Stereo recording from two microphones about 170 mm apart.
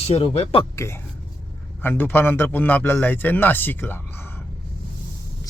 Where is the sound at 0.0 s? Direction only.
35° left (ahead or behind).